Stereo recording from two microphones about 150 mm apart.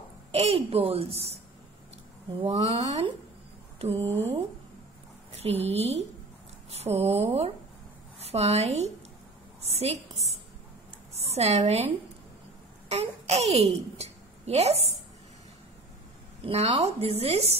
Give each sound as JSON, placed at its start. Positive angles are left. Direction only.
{"t": 0.3, "sound": "speech", "side_deg": -40}
{"t": 2.4, "sound": "speech", "side_deg": -45}
{"t": 5.3, "sound": "a woman's voice", "side_deg": -45}
{"t": 11.2, "sound": "speech", "side_deg": -45}
{"t": 12.9, "sound": "a child's voice", "side_deg": -45}
{"t": 16.4, "sound": "speech", "side_deg": -40}